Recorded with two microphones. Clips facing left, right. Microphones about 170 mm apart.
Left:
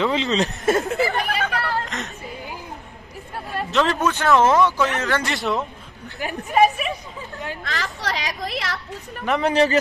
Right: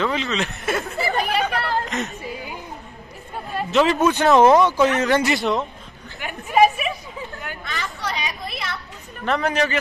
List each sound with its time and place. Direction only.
0.0 s speech: 20° left (ahead or behind)
0.3 s speech: 35° left (ahead or behind)
1.0 s chatter: 20° right (ahead or behind)
1.9 s a sound: 5° right (ahead or behind)
3.5 s speech: centre (ahead or behind)
4.0 s a man's voice: 15° right (ahead or behind)
5.3 s speech: centre (ahead or behind)
6.1 s a sound: 35° left (ahead or behind)
6.5 s a sound: centre (ahead or behind)
7.6 s a sound: 90° left
9.2 s speech: 15° left (ahead or behind)
9.5 s speech: 35° left (ahead or behind)